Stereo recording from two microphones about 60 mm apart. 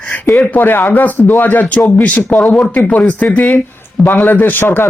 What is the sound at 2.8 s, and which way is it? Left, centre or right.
Speech, left.